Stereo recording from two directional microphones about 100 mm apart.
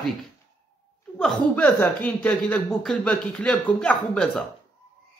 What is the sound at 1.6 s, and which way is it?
A man's voice, 15° left (ahead or behind).